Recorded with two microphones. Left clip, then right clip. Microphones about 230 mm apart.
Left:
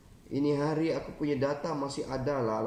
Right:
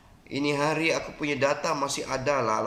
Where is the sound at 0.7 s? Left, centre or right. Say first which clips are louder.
Right 5 dB; right.